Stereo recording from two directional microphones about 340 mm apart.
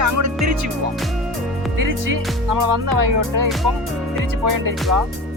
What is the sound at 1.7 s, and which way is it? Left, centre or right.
Music, right.